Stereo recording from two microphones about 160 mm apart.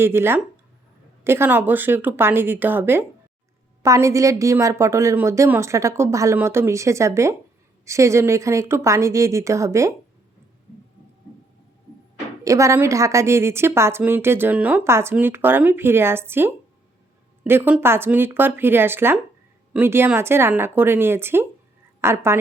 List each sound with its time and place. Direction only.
0.0 s a woman's voice: 15° right (ahead or behind)
12.5 s a woman's voice: 20° right (ahead or behind)